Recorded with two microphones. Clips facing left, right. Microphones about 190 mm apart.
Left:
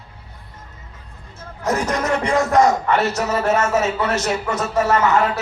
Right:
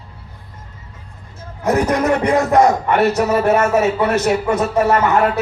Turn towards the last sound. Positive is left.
turn(degrees=-60)  # may be behind; listen again after turning